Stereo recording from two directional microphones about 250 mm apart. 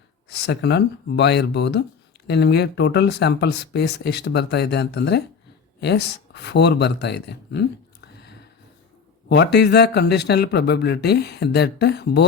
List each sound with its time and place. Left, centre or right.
0.4 s speech: left
8.0 s a sound: left
9.3 s speech: left